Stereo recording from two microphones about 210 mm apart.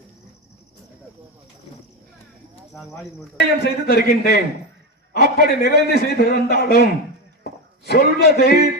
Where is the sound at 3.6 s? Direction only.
50° left (ahead or behind).